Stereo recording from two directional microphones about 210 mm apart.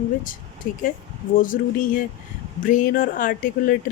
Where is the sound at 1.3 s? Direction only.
40° left (ahead or behind).